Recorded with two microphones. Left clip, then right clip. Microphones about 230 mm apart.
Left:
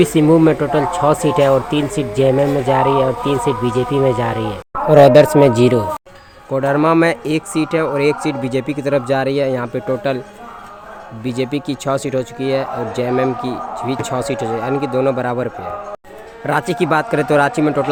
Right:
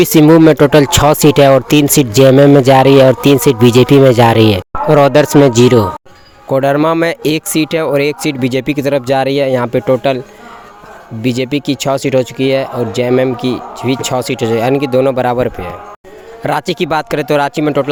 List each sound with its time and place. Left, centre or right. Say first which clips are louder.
0.0 s speech: right 5 dB; right
4.9 s speech: even; right
11.2 s speech: right 6 dB; right